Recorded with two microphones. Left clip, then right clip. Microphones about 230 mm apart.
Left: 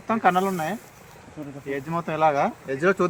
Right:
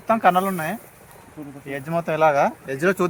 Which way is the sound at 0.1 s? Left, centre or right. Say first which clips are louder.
Right 3 dB; right.